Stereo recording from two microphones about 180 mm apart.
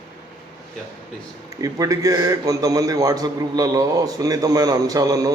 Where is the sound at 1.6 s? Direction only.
20° right (ahead or behind).